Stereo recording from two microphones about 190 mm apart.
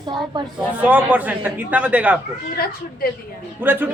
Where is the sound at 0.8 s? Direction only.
10° right (ahead or behind).